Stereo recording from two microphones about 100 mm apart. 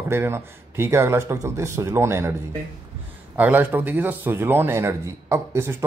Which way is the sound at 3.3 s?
20° right (ahead or behind).